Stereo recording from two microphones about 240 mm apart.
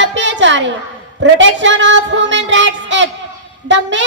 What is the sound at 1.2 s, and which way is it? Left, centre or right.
Child singing, right.